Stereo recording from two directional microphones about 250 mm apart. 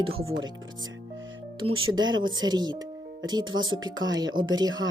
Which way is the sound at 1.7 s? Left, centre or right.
Centre.